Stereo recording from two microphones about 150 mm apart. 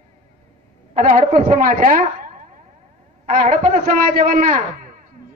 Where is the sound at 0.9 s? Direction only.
60° right (ahead or behind).